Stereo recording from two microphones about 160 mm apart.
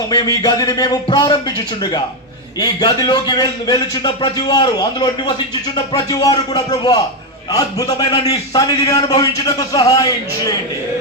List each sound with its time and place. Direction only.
0.1 s a man's voice: 25° left (ahead or behind)
2.6 s a man's voice: 25° left (ahead or behind)
8.2 s a man's voice: 25° left (ahead or behind)